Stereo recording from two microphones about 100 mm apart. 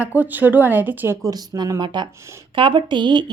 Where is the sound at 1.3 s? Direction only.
40° right (ahead or behind).